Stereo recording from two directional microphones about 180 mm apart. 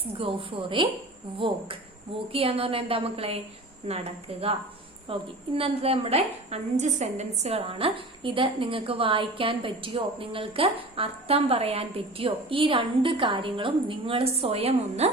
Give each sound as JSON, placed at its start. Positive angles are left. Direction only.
{"t": 0.2, "sound": "a woman's voice", "side_deg": -30}